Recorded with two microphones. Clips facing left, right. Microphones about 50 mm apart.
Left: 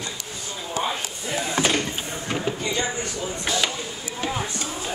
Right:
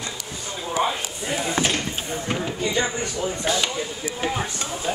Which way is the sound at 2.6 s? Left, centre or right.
Right.